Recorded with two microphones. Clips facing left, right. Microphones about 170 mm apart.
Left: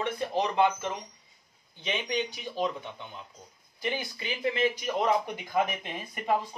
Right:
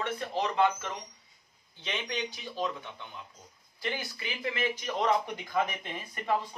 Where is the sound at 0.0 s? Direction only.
15° left (ahead or behind).